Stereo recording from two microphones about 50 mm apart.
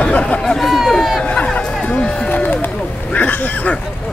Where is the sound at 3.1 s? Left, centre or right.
Left.